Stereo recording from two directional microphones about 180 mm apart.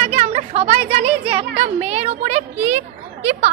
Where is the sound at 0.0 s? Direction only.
35° right (ahead or behind).